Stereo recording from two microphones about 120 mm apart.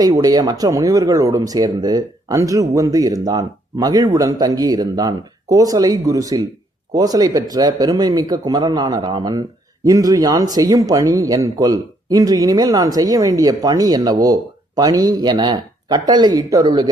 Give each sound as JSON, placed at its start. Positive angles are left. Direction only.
{"t": 0.2, "sound": "speech", "side_deg": -35}